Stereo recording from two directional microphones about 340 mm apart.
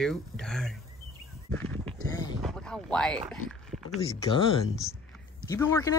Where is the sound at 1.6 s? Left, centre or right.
Centre.